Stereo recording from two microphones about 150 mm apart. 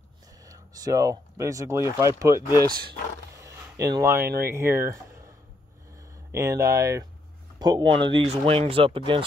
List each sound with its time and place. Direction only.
0.5 s speech: 25° right (ahead or behind)
3.3 s a sound: 20° right (ahead or behind)
4.4 s speech: 15° right (ahead or behind)
6.3 s speech: 20° right (ahead or behind); by 9.2 s 35° right (ahead or behind)